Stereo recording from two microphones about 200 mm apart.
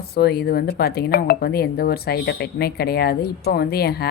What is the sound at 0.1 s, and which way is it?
Speech, 50° left (ahead or behind).